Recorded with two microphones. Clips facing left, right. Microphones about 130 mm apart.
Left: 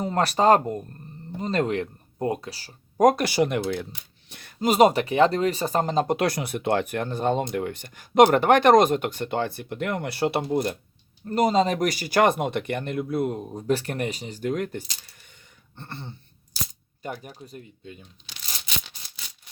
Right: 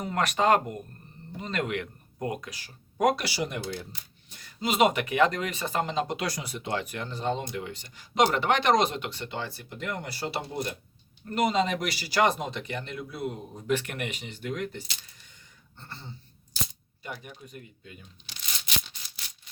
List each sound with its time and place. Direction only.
0.0 s speech: 35° left (ahead or behind); by 3.8 s 60° left (ahead or behind)
4.3 s a sound: 65° left (ahead or behind)
4.6 s speech: 40° left (ahead or behind)
6.1 s speech: 60° left (ahead or behind)
11.3 s speech: 35° left (ahead or behind); by 16.1 s 60° left (ahead or behind)
17.0 s speech: 40° left (ahead or behind)